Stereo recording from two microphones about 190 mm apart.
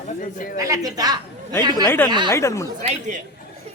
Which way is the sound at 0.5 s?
20° right (ahead or behind).